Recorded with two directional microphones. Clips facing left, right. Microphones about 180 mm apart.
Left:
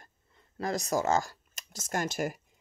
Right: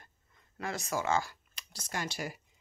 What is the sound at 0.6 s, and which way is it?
Speech, 40° left (ahead or behind).